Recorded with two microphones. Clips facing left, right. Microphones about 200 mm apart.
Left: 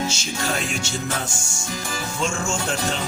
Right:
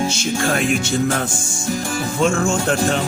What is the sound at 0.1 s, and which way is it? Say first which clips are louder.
Music: right 7 dB; 55° right (ahead or behind).